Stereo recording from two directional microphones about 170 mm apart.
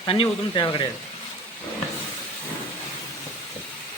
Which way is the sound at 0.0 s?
30° left (ahead or behind).